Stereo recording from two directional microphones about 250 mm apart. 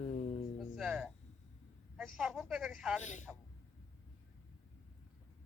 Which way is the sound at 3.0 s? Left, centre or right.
Left.